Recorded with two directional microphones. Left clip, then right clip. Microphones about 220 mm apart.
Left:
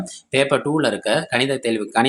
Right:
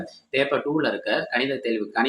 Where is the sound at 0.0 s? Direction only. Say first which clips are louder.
Left 4 dB; 40° left (ahead or behind).